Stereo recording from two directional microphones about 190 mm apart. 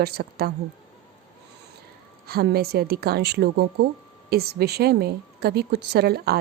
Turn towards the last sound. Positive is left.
turn(degrees=-55)  # may be behind; listen again after turning